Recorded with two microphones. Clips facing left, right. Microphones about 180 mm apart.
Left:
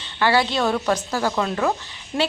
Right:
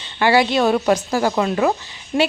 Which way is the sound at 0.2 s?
10° right (ahead or behind).